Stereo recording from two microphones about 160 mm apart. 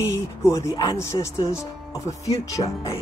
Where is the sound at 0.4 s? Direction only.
20° left (ahead or behind).